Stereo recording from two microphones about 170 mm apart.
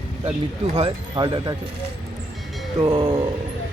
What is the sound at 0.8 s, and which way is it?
Speech, 30° right (ahead or behind).